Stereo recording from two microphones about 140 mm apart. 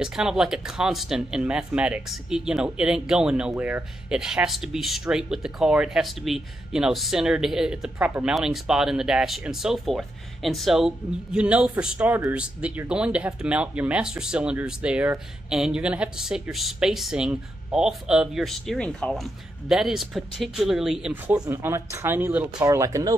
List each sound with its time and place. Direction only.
0.0 s speech: 5° right (ahead or behind)
21.1 s speech: 15° right (ahead or behind)
22.7 s speech: 25° right (ahead or behind)